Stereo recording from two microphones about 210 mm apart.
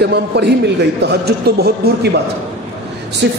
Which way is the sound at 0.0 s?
50° right (ahead or behind).